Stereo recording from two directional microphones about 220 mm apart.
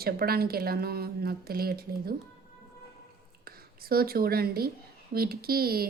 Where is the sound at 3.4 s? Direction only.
45° right (ahead or behind).